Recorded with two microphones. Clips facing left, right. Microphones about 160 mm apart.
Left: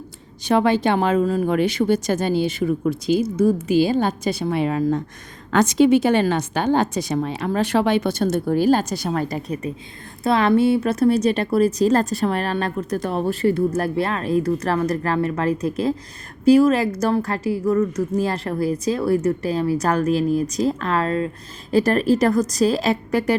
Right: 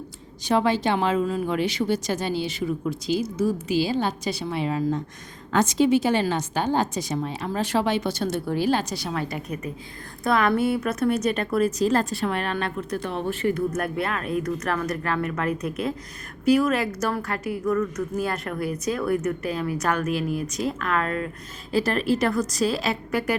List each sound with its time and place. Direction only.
0.4 s speech: 60° left (ahead or behind)
5.5 s a woman's voice: 70° left (ahead or behind); by 9.6 s 40° left (ahead or behind)
10.2 s a woman's voice: 30° left (ahead or behind)
21.7 s a woman's voice: 45° left (ahead or behind)